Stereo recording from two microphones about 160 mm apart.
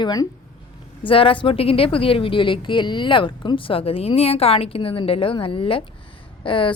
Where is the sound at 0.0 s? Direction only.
25° left (ahead or behind).